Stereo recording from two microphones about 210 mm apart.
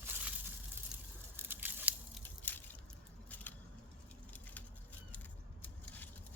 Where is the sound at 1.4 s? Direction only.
10° right (ahead or behind).